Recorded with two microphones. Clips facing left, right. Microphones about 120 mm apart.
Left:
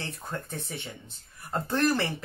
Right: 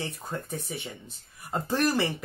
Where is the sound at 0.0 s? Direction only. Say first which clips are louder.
Right 2 dB; 15° right (ahead or behind).